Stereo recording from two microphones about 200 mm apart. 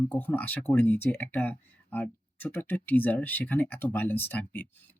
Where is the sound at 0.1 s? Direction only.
10° left (ahead or behind).